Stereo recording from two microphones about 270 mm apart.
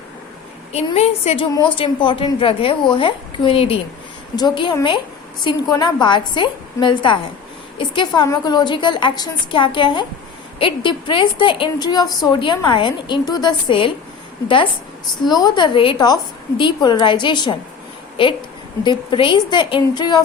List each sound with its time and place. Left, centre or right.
0.7 s a woman's voice: left
18.8 s a woman's voice: centre